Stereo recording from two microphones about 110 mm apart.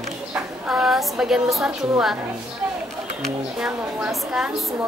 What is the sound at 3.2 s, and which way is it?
Speech, centre (ahead or behind).